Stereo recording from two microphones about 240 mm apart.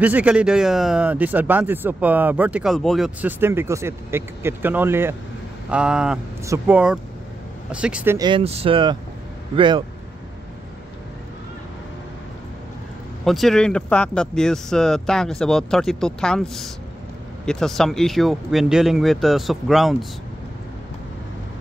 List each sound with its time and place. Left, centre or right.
0.0 s speech: centre
13.2 s speech: centre